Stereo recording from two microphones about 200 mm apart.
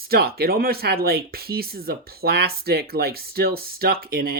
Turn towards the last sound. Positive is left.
turn(degrees=-50)  # may be behind; listen again after turning